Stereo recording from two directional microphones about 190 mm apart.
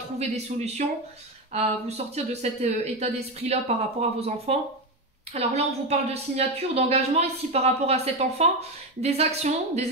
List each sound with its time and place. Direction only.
0.2 s a woman's voice: 35° right (ahead or behind)